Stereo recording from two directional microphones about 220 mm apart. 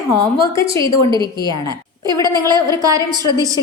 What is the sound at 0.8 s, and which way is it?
Speech, 20° right (ahead or behind).